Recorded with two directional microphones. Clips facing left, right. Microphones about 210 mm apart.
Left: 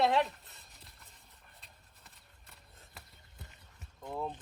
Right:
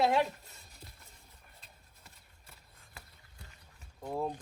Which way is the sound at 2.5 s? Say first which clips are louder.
Left 1 dB; centre (ahead or behind).